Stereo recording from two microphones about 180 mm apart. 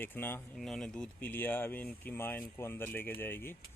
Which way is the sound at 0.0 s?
10° left (ahead or behind).